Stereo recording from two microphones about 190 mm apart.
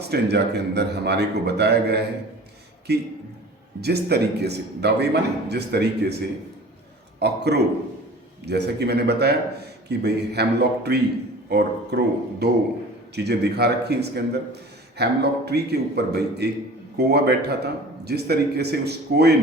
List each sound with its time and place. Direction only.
0.1 s a man's voice: 60° right (ahead or behind)